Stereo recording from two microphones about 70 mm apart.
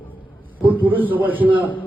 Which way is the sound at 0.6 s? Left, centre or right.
Right.